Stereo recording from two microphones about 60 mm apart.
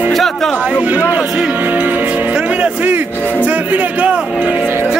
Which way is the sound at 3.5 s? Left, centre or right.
Right.